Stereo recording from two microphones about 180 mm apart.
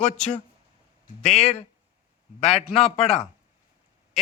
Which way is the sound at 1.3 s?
35° left (ahead or behind).